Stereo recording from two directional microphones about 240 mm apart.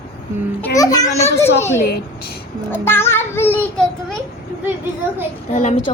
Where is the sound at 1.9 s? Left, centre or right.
Left.